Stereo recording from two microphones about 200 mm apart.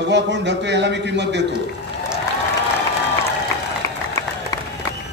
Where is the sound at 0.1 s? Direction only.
60° right (ahead or behind).